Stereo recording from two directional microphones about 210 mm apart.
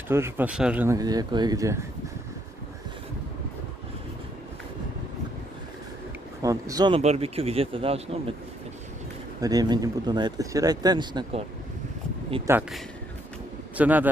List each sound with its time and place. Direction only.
0.1 s speech: 10° right (ahead or behind)
6.4 s speech: 15° right (ahead or behind)
7.0 s speech: 30° right (ahead or behind)
9.4 s speech: 15° right (ahead or behind)
12.5 s speech: 10° right (ahead or behind)
13.7 s a man's voice: 10° right (ahead or behind)